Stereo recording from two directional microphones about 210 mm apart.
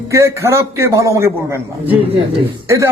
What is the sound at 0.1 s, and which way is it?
A man's voice, 15° right (ahead or behind).